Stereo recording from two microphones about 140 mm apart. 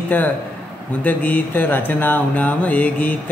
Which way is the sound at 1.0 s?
10° left (ahead or behind).